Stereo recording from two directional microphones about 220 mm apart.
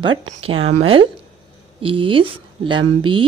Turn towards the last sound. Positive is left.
turn(degrees=-20)  # may be behind; listen again after turning